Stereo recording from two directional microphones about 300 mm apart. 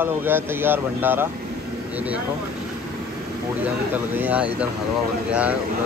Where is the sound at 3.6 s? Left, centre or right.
Centre.